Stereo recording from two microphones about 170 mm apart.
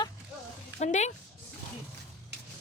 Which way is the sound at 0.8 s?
40° left (ahead or behind).